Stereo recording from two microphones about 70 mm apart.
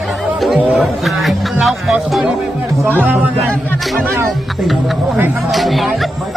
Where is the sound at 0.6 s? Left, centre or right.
Right.